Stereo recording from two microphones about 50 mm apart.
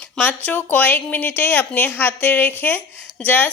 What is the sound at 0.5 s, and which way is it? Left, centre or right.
Speech, left.